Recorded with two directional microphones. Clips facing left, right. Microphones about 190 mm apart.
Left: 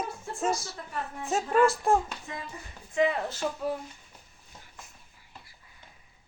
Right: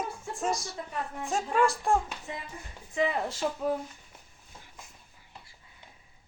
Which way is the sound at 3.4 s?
5° right (ahead or behind).